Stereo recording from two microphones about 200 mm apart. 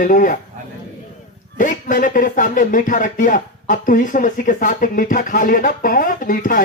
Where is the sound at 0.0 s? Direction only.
40° left (ahead or behind).